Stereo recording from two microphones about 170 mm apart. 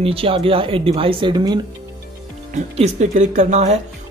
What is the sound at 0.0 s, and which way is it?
Speech, 35° right (ahead or behind).